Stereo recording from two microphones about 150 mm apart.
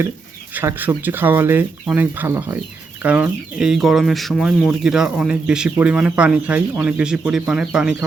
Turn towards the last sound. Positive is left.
turn(degrees=-5)  # may be behind; listen again after turning